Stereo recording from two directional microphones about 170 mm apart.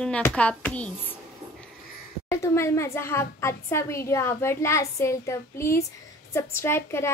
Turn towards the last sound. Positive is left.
turn(degrees=15)  # may be behind; listen again after turning